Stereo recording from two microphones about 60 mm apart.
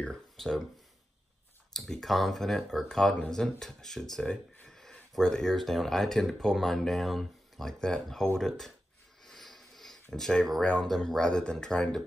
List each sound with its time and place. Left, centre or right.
0.0 s speech: centre
1.7 s speech: centre
9.2 s a sound: centre
10.1 s speech: centre
10.6 s speech: centre